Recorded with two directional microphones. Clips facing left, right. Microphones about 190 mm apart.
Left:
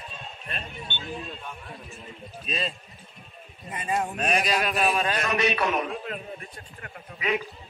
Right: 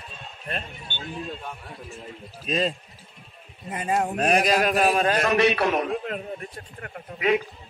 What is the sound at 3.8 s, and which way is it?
A man's voice, 45° right (ahead or behind).